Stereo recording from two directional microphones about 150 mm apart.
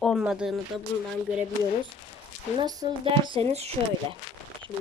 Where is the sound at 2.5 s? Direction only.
25° right (ahead or behind); by 3.7 s 45° right (ahead or behind).